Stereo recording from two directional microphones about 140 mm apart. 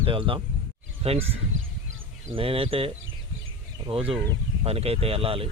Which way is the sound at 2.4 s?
40° right (ahead or behind).